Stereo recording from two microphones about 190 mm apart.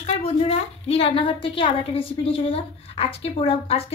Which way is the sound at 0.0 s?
30° left (ahead or behind).